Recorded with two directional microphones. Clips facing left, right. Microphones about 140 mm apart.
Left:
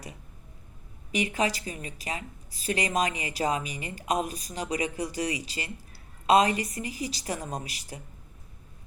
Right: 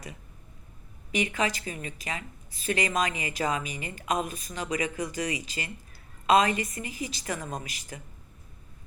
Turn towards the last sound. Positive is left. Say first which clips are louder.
# left 1 dB
turn(degrees=35)  # may be behind; listen again after turning